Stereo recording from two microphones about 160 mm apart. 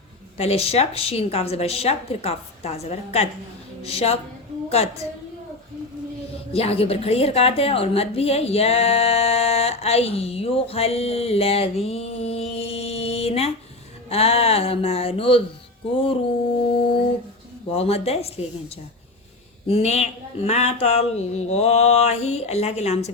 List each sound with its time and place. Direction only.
0.3 s a woman's voice: 40° left (ahead or behind)
6.3 s a woman's voice: 40° left (ahead or behind)
16.6 s a woman's voice: 35° left (ahead or behind)
19.6 s a woman's voice: 40° left (ahead or behind)